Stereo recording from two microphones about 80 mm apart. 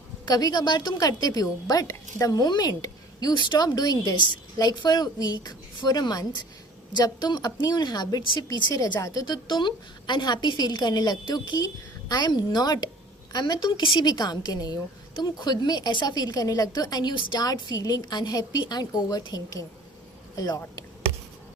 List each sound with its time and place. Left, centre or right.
0.3 s a woman's voice: left
3.4 s a woman's voice: left
8.7 s a woman's voice: left
9.2 s a woman's voice: left
16.0 s a woman's voice: left